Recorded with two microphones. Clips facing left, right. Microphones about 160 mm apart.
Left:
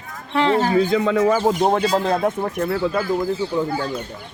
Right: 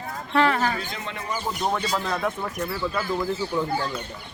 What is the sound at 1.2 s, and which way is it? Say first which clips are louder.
Speech: left 11 dB; 90° left.